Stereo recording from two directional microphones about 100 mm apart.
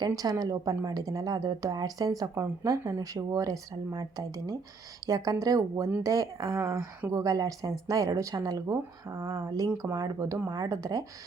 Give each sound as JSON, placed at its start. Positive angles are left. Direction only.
{"t": 0.2, "sound": "speech", "side_deg": -35}